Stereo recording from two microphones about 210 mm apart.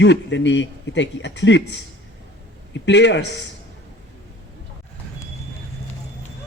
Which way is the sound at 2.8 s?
55° left (ahead or behind).